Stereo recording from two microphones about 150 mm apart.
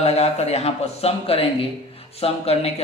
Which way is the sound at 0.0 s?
45° left (ahead or behind).